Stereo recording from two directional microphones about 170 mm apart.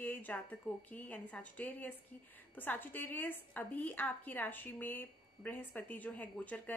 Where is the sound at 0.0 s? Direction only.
10° left (ahead or behind).